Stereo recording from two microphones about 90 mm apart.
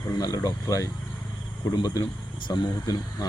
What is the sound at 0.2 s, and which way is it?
Speech, 45° left (ahead or behind).